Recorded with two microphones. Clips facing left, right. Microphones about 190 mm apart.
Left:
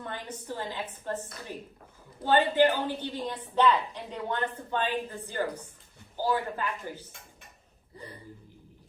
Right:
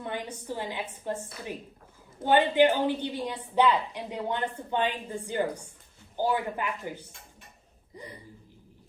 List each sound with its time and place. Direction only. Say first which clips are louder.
0.0 s a woman's voice: right 3 dB; 10° right (ahead or behind)